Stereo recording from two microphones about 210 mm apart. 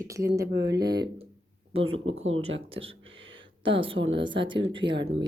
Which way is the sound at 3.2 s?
65° right (ahead or behind).